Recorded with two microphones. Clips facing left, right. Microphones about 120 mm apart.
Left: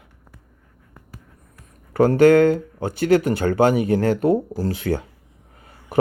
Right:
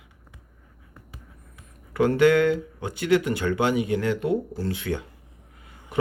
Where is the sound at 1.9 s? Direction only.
40° left (ahead or behind).